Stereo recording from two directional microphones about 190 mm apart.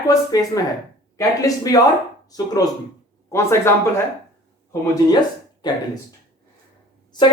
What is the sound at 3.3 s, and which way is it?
Speech, 15° left (ahead or behind).